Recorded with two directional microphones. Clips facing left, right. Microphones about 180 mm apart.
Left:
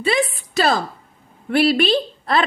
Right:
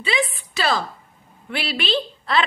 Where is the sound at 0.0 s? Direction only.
45° left (ahead or behind).